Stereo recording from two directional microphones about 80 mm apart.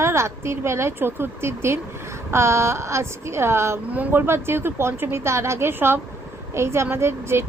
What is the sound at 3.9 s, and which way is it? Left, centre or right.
Speech, centre.